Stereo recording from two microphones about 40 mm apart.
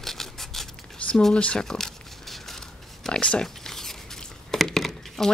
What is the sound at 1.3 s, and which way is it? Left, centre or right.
Speech, left.